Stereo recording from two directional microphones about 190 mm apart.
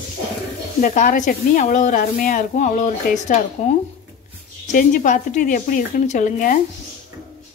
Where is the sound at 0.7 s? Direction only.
40° left (ahead or behind).